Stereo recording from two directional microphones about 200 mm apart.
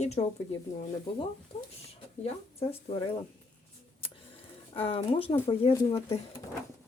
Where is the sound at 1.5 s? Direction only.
30° left (ahead or behind).